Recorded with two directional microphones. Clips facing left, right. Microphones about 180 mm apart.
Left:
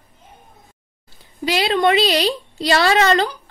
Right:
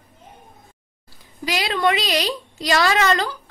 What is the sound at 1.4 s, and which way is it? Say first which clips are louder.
A woman's voice: left 4 dB; 30° left (ahead or behind).